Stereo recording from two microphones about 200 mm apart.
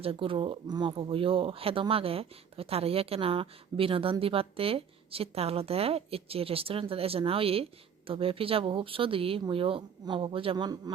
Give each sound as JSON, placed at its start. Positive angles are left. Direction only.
{"t": 0.0, "sound": "speech", "side_deg": -25}